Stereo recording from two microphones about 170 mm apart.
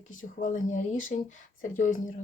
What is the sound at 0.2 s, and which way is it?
Speech, 50° left (ahead or behind).